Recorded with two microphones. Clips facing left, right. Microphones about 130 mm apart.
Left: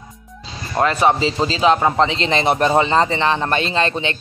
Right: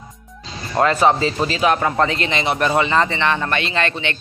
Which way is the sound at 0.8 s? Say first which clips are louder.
Even; 20° left (ahead or behind).